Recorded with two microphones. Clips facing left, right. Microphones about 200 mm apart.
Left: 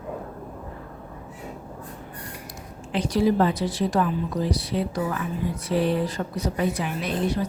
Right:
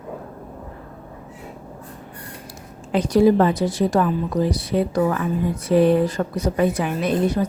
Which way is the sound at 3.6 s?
45° right (ahead or behind).